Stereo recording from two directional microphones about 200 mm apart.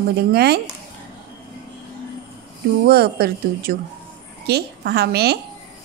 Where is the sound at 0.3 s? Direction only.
55° right (ahead or behind).